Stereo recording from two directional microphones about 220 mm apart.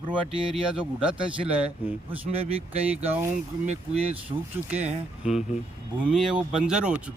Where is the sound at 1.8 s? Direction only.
10° right (ahead or behind).